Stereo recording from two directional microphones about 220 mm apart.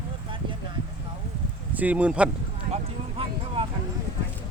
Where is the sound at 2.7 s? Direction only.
25° right (ahead or behind).